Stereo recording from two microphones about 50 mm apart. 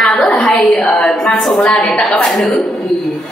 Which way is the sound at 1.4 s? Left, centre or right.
Centre.